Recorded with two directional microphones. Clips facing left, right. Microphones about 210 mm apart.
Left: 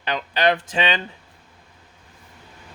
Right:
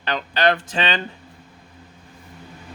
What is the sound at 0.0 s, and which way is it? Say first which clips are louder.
Speech: right 1 dB; 15° left (ahead or behind).